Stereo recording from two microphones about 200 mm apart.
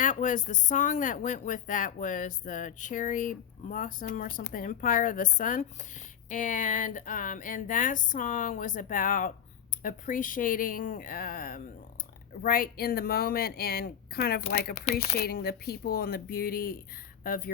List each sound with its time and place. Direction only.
0.0 s speech: 40° left (ahead or behind)